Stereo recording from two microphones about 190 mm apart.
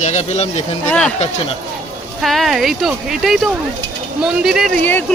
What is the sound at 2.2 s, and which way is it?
Speech, centre (ahead or behind).